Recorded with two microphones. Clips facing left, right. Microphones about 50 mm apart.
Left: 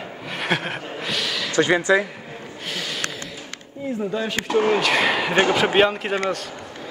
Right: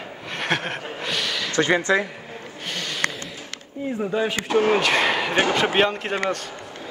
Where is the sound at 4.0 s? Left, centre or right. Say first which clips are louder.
Right 2 dB; centre.